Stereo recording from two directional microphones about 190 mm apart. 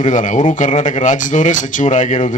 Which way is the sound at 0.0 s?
40° left (ahead or behind).